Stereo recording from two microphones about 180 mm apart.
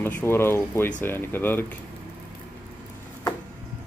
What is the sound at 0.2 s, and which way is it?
Speech, 15° left (ahead or behind).